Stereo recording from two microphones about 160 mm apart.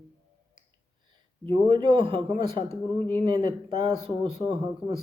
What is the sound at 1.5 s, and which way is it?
A man's voice, 30° right (ahead or behind).